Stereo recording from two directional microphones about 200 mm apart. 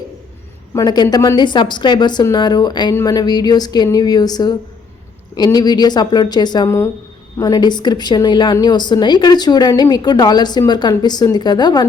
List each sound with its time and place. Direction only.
0.7 s a woman's voice: 15° left (ahead or behind)